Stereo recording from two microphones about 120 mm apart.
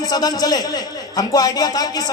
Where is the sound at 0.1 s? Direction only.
35° left (ahead or behind).